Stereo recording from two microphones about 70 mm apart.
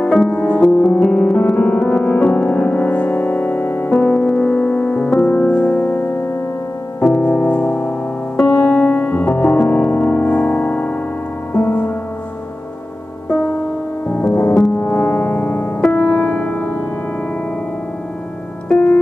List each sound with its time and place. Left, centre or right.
0.0 s music: centre
14.0 s music: left
14.8 s gong: left
15.9 s music: left
18.7 s music: centre